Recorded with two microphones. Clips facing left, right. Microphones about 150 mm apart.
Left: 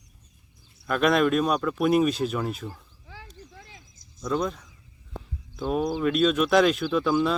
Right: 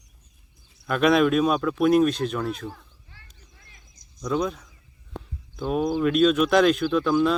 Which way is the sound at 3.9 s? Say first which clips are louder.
Right 1 dB; 5° left (ahead or behind).